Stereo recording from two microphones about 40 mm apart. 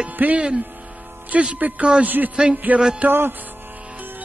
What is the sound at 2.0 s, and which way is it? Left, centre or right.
Speech, right.